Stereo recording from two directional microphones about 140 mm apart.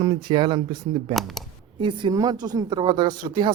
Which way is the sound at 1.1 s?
Centre (ahead or behind).